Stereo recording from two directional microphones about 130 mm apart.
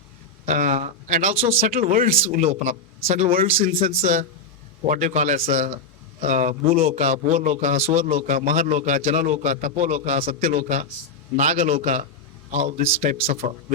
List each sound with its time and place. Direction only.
0.4 s a man's voice: 70° right (ahead or behind)
1.6 s speech: 90° right
2.5 s a man's voice: 60° right (ahead or behind); by 6.7 s 75° right (ahead or behind)
6.7 s a man's voice: 55° right (ahead or behind); by 9.0 s 75° right (ahead or behind)
9.0 s a man's voice: 60° right (ahead or behind); by 13.1 s 85° right
13.2 s a man's voice: 55° right (ahead or behind)